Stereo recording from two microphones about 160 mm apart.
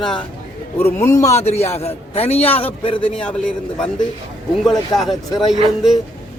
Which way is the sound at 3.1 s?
5° left (ahead or behind).